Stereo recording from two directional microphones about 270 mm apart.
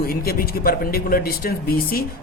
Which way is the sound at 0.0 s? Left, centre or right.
Left.